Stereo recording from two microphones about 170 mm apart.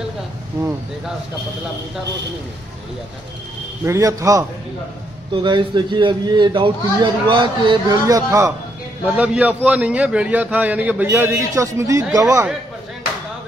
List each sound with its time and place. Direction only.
3.8 s a man's voice: 20° right (ahead or behind)
9.0 s a man's voice: 5° right (ahead or behind)